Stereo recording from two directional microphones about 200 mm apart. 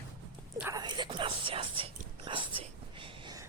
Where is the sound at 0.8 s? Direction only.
20° right (ahead or behind).